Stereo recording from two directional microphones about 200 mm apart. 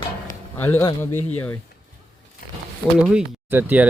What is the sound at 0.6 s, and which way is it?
Speech, 10° left (ahead or behind).